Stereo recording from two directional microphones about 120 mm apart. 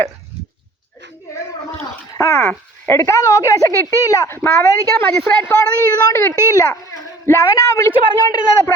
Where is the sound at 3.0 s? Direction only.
30° left (ahead or behind).